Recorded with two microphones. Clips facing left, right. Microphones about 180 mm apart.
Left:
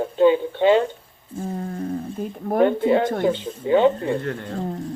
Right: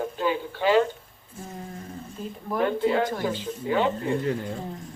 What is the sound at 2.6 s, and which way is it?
Speech, 25° left (ahead or behind).